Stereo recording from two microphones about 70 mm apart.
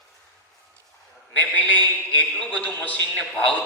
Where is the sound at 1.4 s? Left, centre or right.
Left.